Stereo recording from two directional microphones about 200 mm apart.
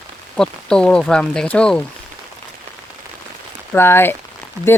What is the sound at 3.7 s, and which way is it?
Speech, 10° left (ahead or behind).